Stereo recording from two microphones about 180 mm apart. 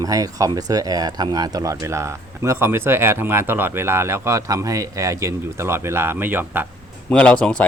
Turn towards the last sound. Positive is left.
turn(degrees=5)  # may be behind; listen again after turning